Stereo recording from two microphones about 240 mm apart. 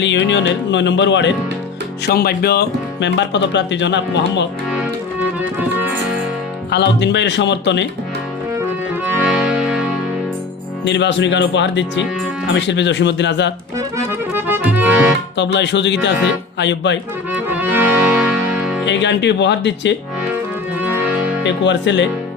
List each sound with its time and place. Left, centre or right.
0.0 s speech: left
5.4 s music: centre
6.7 s speech: left
9.1 s accordion: centre
10.8 s speech: left
13.7 s accordion: centre
15.5 s speech: left
17.3 s accordion: centre
18.9 s speech: left
21.4 s speech: left